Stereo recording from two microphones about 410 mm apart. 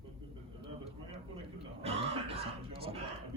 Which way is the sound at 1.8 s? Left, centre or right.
Centre.